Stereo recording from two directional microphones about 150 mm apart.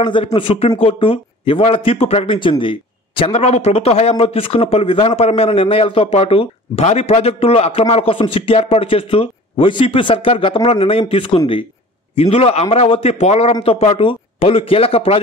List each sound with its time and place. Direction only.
0.0 s a man's voice: 35° left (ahead or behind)